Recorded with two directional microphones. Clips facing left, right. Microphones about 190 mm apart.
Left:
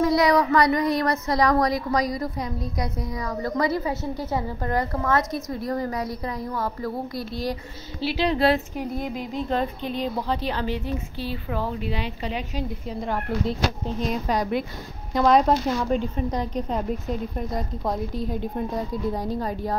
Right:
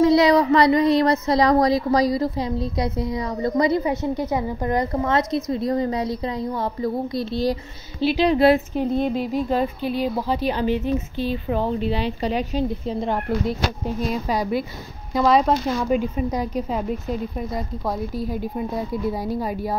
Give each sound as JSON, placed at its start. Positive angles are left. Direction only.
{"t": 0.0, "sound": "speech", "side_deg": -25}
{"t": 8.7, "sound": "speech", "side_deg": -25}
{"t": 9.5, "sound": "speech", "side_deg": -10}
{"t": 13.5, "sound": "speech", "side_deg": -5}